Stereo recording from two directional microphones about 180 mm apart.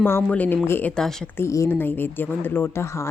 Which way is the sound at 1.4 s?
15° left (ahead or behind).